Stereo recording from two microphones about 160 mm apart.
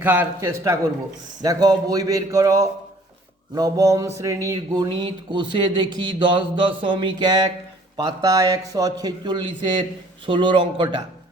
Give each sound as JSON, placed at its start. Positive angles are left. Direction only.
{"t": 0.0, "sound": "speech", "side_deg": -10}